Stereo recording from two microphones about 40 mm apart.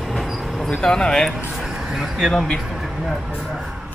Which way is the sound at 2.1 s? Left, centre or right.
Centre.